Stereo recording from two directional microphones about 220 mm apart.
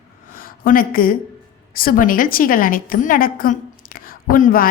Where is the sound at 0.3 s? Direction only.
40° left (ahead or behind).